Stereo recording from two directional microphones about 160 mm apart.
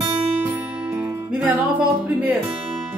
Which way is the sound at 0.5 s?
10° right (ahead or behind).